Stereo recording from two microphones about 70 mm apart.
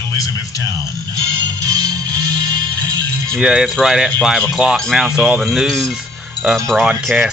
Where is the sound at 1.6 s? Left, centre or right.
Right.